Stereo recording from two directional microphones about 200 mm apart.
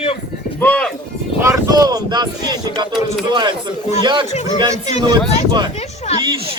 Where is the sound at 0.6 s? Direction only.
5° left (ahead or behind).